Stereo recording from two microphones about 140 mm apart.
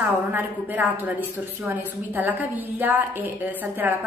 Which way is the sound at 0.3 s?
10° right (ahead or behind).